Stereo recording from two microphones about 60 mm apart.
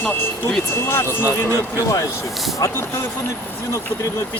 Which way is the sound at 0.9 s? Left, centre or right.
Left.